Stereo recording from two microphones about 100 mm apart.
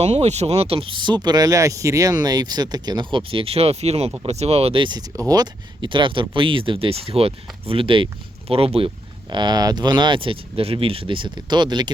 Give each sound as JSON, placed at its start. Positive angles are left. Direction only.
{"t": 0.0, "sound": "speech", "side_deg": -90}
{"t": 4.8, "sound": "speech", "side_deg": -45}
{"t": 9.3, "sound": "speech", "side_deg": -45}